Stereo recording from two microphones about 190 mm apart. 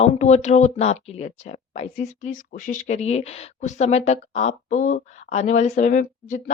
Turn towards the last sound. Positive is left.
turn(degrees=45)  # may be behind; listen again after turning